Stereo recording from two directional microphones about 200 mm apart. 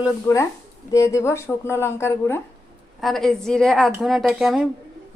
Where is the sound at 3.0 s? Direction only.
Centre (ahead or behind).